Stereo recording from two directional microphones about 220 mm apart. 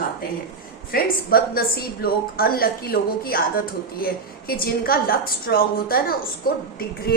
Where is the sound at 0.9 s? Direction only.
45° left (ahead or behind).